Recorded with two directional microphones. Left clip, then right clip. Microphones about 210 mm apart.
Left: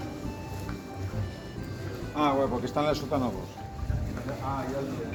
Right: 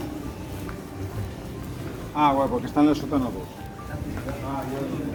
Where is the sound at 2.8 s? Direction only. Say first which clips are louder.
Right 6 dB; 40° left (ahead or behind).